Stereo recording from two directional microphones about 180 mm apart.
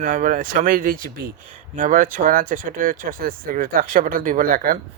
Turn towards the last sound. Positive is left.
turn(degrees=-50)  # may be behind; listen again after turning